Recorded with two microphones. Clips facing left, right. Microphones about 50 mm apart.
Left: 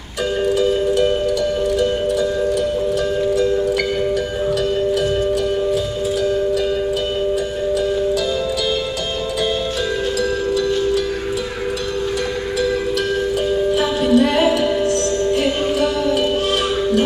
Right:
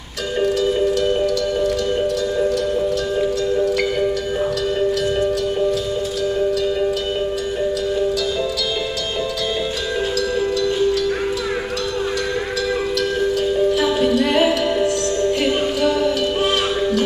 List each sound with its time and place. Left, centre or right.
0.6 s music: centre
14.1 s music: centre